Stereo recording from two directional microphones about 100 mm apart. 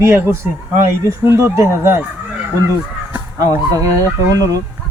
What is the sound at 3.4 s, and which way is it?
Speech, 35° right (ahead or behind).